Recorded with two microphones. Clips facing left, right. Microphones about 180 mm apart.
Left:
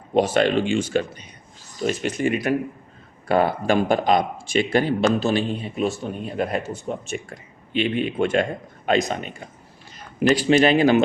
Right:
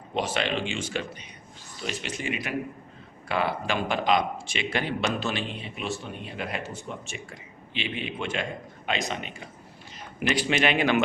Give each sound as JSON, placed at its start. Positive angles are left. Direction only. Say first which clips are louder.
{"t": 0.1, "sound": "speech", "louder": "left 9 dB", "side_deg": 45}
{"t": 10.2, "sound": "speech", "louder": "left 9 dB", "side_deg": 35}